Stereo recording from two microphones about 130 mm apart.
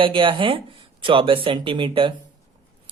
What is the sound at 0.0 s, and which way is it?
Speech, 40° right (ahead or behind).